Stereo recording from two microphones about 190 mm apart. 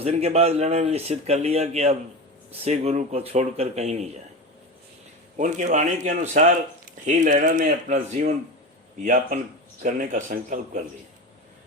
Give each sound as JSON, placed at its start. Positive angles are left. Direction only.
{"t": 0.0, "sound": "speech", "side_deg": -35}
{"t": 5.4, "sound": "speech", "side_deg": -40}